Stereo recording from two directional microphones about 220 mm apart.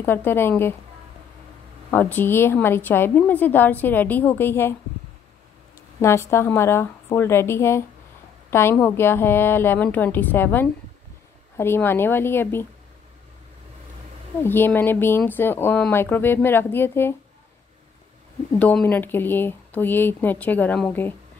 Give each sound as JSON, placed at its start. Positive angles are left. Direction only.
{"t": 0.0, "sound": "a woman's voice", "side_deg": 10}
{"t": 1.9, "sound": "a woman's voice", "side_deg": 5}
{"t": 5.9, "sound": "a woman's voice", "side_deg": 10}
{"t": 14.4, "sound": "a woman's voice", "side_deg": 10}
{"t": 18.5, "sound": "a woman's voice", "side_deg": 5}